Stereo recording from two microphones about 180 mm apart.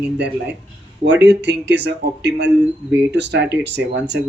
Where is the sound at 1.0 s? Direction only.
70° right (ahead or behind).